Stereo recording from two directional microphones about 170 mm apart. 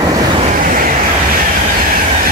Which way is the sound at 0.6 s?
55° right (ahead or behind).